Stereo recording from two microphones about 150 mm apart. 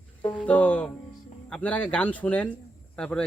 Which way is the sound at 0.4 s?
10° left (ahead or behind).